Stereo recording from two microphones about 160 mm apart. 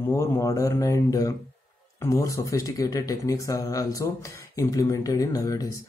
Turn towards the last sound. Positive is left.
turn(degrees=20)  # may be behind; listen again after turning